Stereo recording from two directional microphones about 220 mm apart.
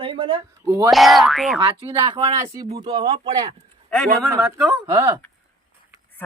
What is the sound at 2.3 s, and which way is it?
Speech, 15° right (ahead or behind).